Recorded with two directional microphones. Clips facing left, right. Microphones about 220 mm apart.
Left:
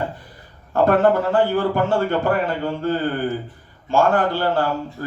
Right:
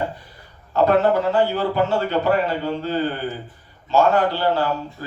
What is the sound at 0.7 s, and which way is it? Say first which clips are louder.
Speech: left 1 dB; 50° left (ahead or behind).